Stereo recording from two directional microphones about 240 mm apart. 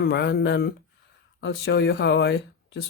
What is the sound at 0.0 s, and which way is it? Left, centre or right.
Speech, left.